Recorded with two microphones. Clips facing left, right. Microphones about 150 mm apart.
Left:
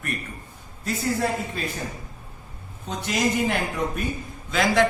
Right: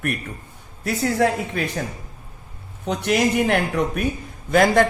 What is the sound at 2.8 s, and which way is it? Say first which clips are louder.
A woman's voice: right 5 dB; 65° right (ahead or behind).